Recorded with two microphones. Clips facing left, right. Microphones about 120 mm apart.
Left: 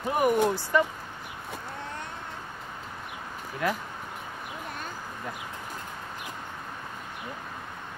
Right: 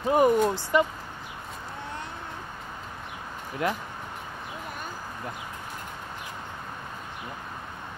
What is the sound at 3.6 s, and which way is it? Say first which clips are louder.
Speech: right 1 dB; 20° right (ahead or behind).